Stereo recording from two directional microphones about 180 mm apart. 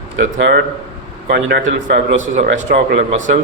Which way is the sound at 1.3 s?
75° right (ahead or behind).